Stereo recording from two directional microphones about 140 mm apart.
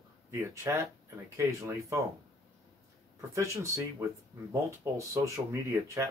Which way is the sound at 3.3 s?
20° right (ahead or behind).